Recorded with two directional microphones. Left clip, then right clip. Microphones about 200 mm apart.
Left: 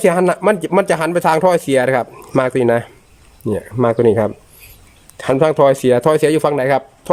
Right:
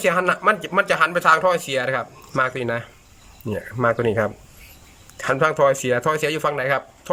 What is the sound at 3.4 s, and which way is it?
Speech, 20° left (ahead or behind).